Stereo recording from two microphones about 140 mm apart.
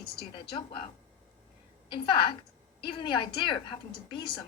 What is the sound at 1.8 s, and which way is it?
A woman's voice, 35° left (ahead or behind).